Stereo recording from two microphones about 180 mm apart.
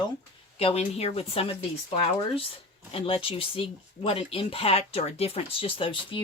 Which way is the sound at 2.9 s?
30° left (ahead or behind).